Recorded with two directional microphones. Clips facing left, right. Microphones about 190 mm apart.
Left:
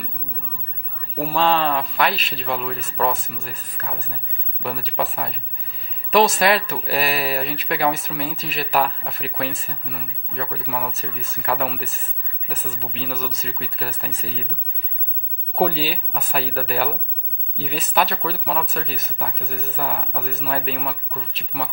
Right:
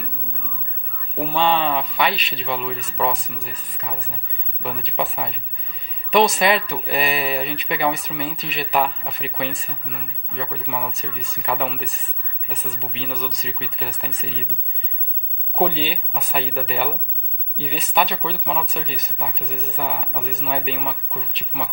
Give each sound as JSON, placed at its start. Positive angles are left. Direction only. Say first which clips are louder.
{"t": 1.1, "sound": "speech", "louder": "even", "side_deg": 0}